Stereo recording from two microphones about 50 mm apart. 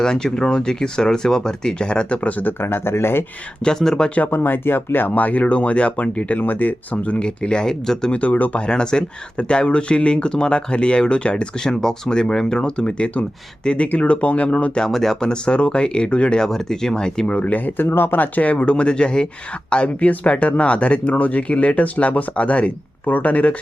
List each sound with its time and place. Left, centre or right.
0.0 s speech: centre; by 3.2 s left
3.6 s speech: centre
4.3 s speech: left; by 8.1 s centre
8.1 s speech: left
8.6 s speech: centre
14.8 s speech: centre
17.3 s speech: left